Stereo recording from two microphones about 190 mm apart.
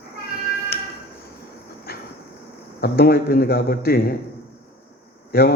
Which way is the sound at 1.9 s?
55° left (ahead or behind).